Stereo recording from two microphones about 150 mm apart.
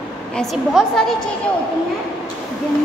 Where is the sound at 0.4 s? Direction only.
Centre (ahead or behind).